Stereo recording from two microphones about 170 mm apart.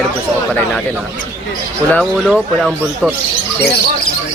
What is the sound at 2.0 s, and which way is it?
Speech, centre (ahead or behind).